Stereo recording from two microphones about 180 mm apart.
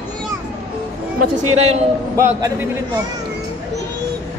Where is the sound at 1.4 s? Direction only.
35° right (ahead or behind).